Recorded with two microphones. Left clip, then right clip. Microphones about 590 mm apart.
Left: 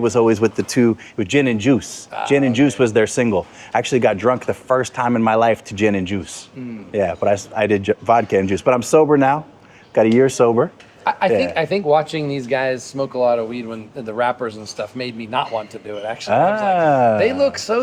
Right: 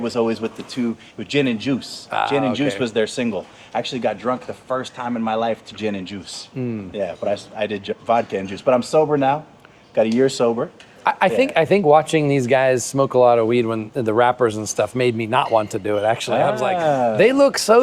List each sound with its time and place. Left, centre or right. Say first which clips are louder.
0.0 s speech: left 6 dB; left
0.8 s speech: left 9 dB; left
1.2 s speech: left 3 dB; left
11.0 s speech: even; right
16.3 s speech: left 8 dB; left
17.2 s speech: right 2 dB; right